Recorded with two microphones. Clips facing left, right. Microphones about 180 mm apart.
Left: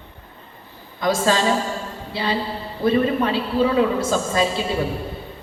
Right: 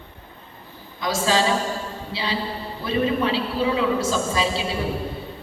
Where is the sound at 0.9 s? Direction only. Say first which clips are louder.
Left 3 dB; 50° left (ahead or behind).